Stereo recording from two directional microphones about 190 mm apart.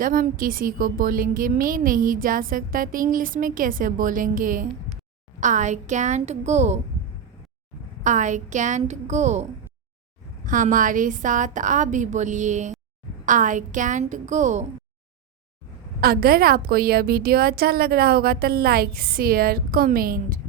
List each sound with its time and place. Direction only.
0.0 s a woman's voice: 45° right (ahead or behind)
8.0 s a woman's voice: 40° right (ahead or behind)
16.0 s a woman's voice: 55° right (ahead or behind)